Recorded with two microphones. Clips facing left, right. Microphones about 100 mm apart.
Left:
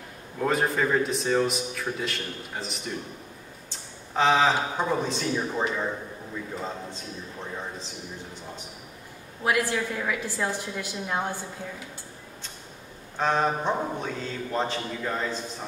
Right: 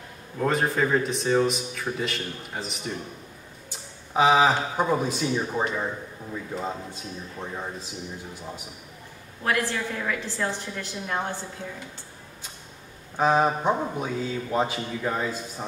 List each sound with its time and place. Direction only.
0.4 s a man's voice: centre (ahead or behind)
9.4 s a woman's voice: 10° left (ahead or behind)
13.2 s a man's voice: 10° right (ahead or behind)